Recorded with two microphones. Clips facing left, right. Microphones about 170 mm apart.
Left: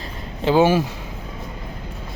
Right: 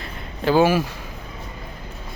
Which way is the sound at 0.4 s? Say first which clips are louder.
Left 1 dB; 20° left (ahead or behind).